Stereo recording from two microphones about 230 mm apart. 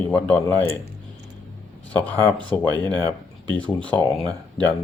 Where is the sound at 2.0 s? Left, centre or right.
Centre.